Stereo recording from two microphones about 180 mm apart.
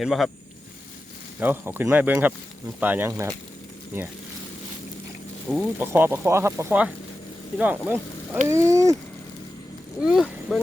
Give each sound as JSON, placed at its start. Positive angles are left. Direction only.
{"t": 0.0, "sound": "speech", "side_deg": 0}
{"t": 1.4, "sound": "speech", "side_deg": -10}
{"t": 5.5, "sound": "speech", "side_deg": 5}
{"t": 5.8, "sound": "speech", "side_deg": -10}
{"t": 10.0, "sound": "speech", "side_deg": -5}